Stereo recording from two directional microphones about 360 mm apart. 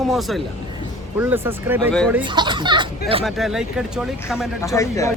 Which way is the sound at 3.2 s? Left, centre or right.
Centre.